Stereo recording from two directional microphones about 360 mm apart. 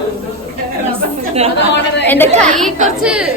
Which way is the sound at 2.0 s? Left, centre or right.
Centre.